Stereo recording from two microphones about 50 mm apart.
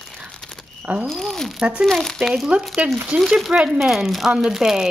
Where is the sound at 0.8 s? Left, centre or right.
Right.